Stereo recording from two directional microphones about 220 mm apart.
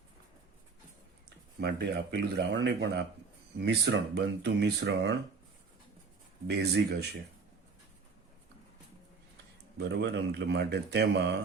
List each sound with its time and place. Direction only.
1.5 s a man's voice: 50° right (ahead or behind)
6.5 s a man's voice: 50° right (ahead or behind)
9.7 s a man's voice: 50° right (ahead or behind)